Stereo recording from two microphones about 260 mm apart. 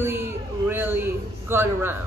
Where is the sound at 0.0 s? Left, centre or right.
Centre.